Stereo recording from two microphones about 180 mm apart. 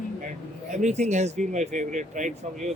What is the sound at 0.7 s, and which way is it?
Speech, 40° right (ahead or behind).